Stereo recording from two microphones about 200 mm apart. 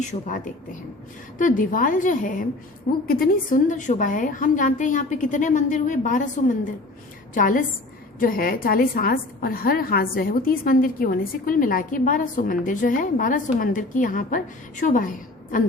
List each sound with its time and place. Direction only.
0.0 s a woman's voice: 40° left (ahead or behind)
7.3 s a woman's voice: 40° left (ahead or behind)